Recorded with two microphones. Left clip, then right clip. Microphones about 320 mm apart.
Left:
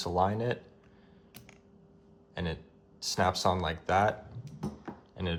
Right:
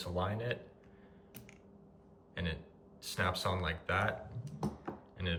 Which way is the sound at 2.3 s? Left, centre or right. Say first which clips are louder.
Left 4 dB; centre.